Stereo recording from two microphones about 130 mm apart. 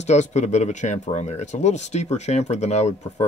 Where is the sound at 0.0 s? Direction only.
65° left (ahead or behind).